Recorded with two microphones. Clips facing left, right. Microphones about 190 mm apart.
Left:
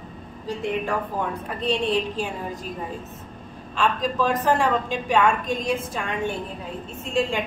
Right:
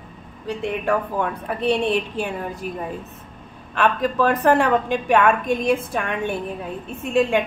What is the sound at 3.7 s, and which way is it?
A woman's voice, 60° right (ahead or behind).